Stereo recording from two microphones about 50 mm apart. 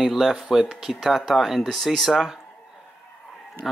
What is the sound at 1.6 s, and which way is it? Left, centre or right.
Speech, centre.